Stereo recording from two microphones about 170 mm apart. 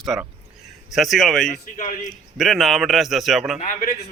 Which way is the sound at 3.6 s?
50° left (ahead or behind).